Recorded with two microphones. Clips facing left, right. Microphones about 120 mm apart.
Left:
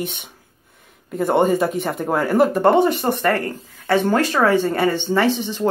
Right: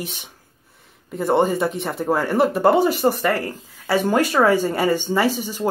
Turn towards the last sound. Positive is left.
turn(degrees=-10)  # may be behind; listen again after turning